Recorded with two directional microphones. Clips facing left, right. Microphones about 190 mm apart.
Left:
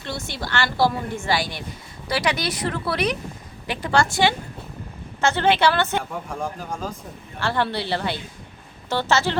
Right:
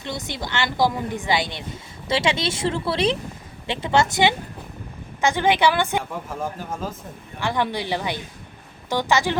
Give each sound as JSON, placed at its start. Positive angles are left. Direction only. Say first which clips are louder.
{"t": 0.0, "sound": "a woman's voice", "louder": "right 1 dB", "side_deg": -20}
{"t": 6.0, "sound": "speech", "louder": "even", "side_deg": 0}
{"t": 7.3, "sound": "speech", "louder": "even", "side_deg": -15}